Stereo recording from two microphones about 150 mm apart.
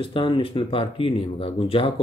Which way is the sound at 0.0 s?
35° left (ahead or behind).